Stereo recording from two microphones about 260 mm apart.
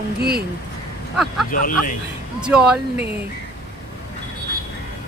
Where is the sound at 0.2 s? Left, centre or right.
Right.